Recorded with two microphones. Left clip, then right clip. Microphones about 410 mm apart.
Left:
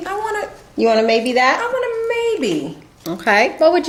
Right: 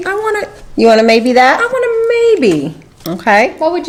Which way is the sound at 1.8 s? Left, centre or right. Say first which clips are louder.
Right 8 dB; right.